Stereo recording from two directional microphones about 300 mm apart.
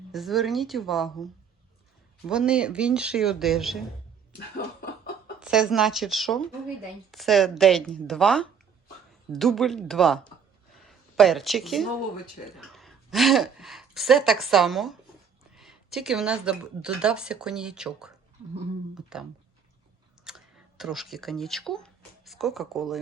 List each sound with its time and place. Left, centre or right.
0.1 s a woman's voice: centre
4.4 s a sound: left
5.4 s a woman's voice: centre
10.8 s a sound: centre
12.5 s a woman's voice: centre
19.1 s a woman's voice: centre